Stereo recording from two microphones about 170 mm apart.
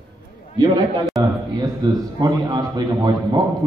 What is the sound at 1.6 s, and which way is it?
A man's voice, 20° right (ahead or behind).